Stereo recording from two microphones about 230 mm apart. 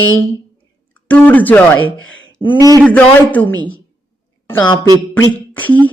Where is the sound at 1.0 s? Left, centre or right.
Centre.